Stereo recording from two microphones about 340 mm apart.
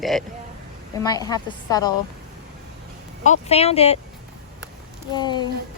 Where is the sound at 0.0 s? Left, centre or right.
Centre.